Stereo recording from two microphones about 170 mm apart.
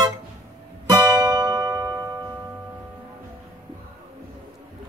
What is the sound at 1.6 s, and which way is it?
Music, 15° right (ahead or behind).